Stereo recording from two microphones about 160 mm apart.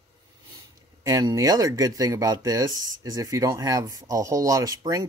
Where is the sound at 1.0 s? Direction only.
20° right (ahead or behind).